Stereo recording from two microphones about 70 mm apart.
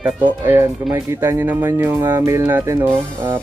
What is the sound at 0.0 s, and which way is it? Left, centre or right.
Speech, right.